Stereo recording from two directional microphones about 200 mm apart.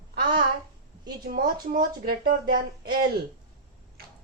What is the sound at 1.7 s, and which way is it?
Speech, 50° right (ahead or behind).